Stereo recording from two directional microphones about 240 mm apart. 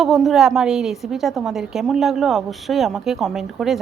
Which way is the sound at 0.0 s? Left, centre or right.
Centre.